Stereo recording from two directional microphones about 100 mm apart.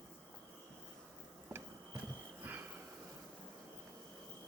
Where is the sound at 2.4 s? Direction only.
20° right (ahead or behind).